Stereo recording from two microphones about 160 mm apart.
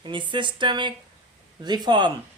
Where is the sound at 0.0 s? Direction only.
30° right (ahead or behind).